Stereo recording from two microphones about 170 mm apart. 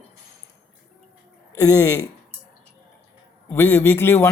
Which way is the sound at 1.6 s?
20° left (ahead or behind).